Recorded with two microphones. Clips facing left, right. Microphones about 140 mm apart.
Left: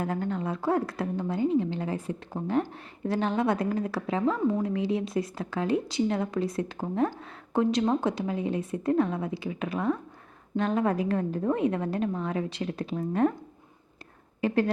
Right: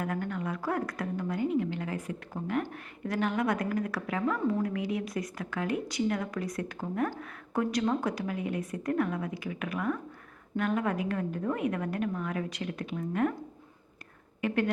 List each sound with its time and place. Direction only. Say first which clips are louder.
0.0 s a woman's voice: left 3 dB; 30° left (ahead or behind)
14.4 s speech: left 4 dB; 35° left (ahead or behind)